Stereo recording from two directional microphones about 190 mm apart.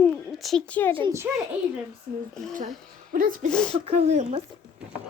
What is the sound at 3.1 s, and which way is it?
Speech, 45° right (ahead or behind).